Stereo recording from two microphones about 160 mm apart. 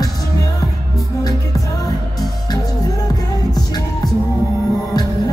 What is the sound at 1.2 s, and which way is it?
Music, 20° left (ahead or behind).